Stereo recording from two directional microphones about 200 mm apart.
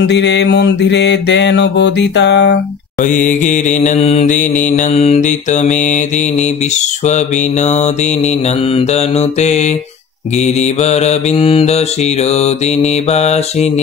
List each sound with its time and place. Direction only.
0.0 s mantra: 60° left (ahead or behind)
3.0 s mantra: 40° left (ahead or behind)
7.1 s mantra: 35° left (ahead or behind)